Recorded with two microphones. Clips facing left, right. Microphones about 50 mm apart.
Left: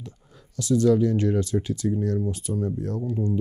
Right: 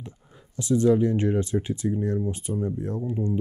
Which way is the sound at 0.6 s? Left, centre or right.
Right.